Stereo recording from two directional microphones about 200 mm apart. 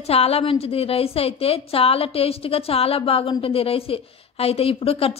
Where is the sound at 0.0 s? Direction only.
30° left (ahead or behind).